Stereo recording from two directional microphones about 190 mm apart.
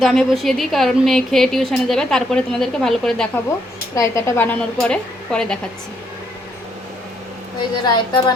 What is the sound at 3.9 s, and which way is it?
Speech, 15° left (ahead or behind).